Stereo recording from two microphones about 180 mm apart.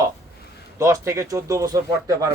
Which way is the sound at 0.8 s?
15° right (ahead or behind).